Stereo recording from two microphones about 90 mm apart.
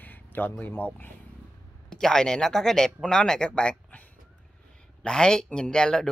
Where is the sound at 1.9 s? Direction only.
5° left (ahead or behind).